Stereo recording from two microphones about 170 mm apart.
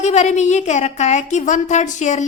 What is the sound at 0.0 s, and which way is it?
A woman's voice, 40° left (ahead or behind).